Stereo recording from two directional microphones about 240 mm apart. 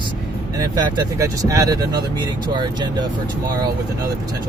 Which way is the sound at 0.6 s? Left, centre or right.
Centre.